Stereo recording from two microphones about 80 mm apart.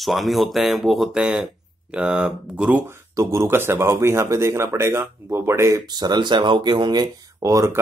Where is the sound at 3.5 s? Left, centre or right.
Right.